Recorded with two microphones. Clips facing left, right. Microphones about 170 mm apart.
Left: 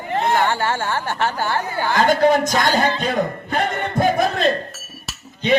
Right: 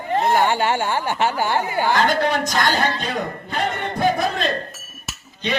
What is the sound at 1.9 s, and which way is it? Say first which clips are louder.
A man's voice: left 8 dB; 45° left (ahead or behind).